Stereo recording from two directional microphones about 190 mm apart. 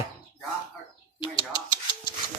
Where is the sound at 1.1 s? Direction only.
25° left (ahead or behind).